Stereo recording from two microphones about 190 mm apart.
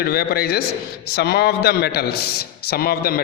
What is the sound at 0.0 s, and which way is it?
A man's voice, 55° left (ahead or behind).